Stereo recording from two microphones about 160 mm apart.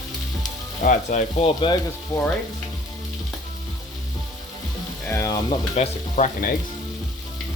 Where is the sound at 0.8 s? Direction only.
50° left (ahead or behind).